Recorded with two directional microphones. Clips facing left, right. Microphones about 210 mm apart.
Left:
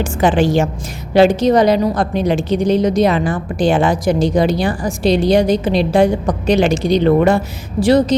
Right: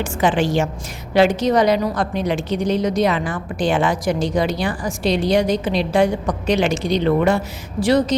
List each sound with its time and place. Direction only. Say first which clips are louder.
0.0 s a woman's voice: left 4 dB; 40° left (ahead or behind)